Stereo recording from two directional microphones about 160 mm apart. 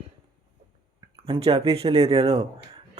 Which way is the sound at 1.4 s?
40° right (ahead or behind).